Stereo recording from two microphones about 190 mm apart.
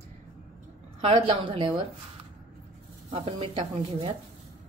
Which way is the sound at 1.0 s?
30° right (ahead or behind).